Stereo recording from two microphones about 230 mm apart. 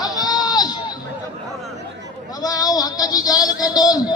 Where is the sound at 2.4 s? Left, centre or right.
Centre.